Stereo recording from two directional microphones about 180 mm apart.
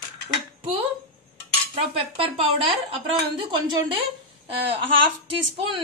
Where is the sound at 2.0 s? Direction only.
30° right (ahead or behind).